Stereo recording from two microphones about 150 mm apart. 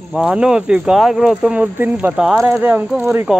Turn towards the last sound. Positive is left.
turn(degrees=-15)  # may be behind; listen again after turning